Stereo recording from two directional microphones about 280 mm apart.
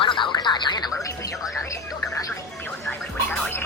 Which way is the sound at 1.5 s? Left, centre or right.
Centre.